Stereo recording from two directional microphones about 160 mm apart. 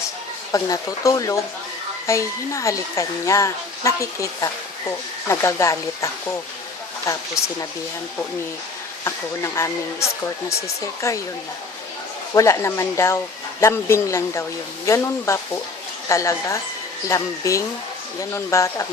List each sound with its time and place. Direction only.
0.5 s speech: 20° left (ahead or behind)
7.1 s speech: 20° left (ahead or behind)
9.0 s speech: 20° left (ahead or behind)
12.3 s speech: 20° left (ahead or behind)